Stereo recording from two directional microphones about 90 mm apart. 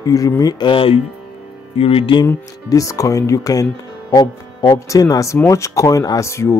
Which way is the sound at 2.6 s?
40° left (ahead or behind).